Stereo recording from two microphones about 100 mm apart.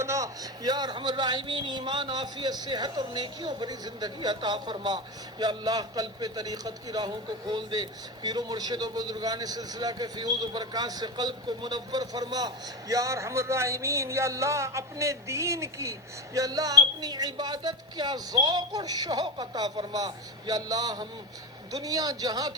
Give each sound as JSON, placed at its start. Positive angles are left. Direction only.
{"t": 0.0, "sound": "a man's voice", "side_deg": -30}